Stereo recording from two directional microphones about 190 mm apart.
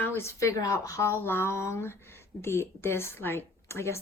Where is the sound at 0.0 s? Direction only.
15° left (ahead or behind).